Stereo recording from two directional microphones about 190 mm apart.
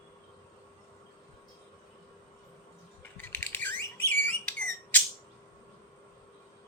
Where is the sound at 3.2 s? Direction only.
10° left (ahead or behind).